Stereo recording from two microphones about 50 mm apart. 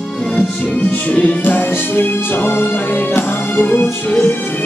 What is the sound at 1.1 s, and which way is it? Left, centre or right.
Music, left.